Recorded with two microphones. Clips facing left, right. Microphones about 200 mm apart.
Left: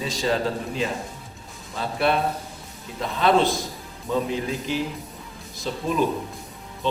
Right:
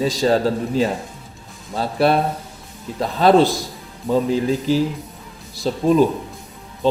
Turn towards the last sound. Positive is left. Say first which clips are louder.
# right 10 dB
turn(degrees=-35)  # may be behind; listen again after turning